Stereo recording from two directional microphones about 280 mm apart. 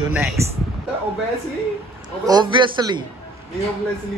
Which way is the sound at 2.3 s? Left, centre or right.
Centre.